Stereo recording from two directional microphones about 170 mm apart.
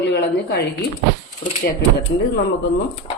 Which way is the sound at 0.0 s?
85° left.